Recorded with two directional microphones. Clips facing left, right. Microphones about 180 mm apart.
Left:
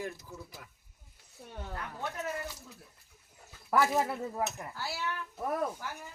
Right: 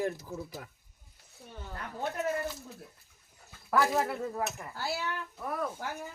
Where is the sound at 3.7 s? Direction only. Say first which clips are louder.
Even; 15° left (ahead or behind).